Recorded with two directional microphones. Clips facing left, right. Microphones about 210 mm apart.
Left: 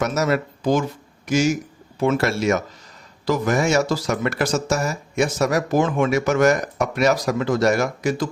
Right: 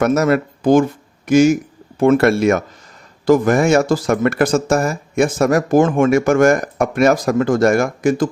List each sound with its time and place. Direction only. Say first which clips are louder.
0.0 s speech: right 6 dB; 55° right (ahead or behind)